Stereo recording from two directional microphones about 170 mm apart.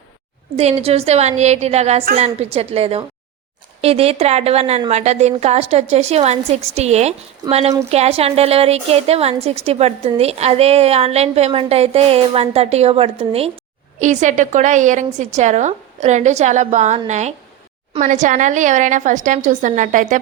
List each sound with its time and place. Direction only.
0.5 s a woman's voice: 35° right (ahead or behind)